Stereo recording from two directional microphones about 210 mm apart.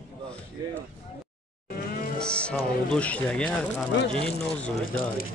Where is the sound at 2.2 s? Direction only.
5° left (ahead or behind).